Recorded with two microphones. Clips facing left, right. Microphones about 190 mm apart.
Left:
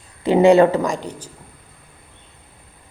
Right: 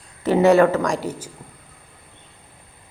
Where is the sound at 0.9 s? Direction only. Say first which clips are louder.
Right 1 dB; 5° right (ahead or behind).